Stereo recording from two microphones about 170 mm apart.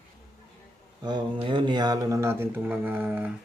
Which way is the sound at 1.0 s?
25° right (ahead or behind).